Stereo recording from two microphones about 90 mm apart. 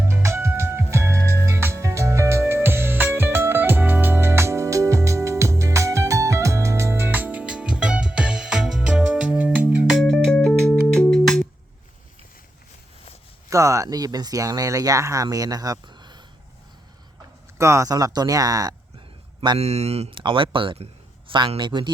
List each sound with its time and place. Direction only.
0.0 s music: 30° right (ahead or behind); by 9.8 s 15° right (ahead or behind)
10.0 s music: 5° left (ahead or behind)
13.5 s speech: 35° right (ahead or behind); by 16.2 s 55° right (ahead or behind)
17.6 s speech: 35° right (ahead or behind)
20.1 s speech: 70° right (ahead or behind)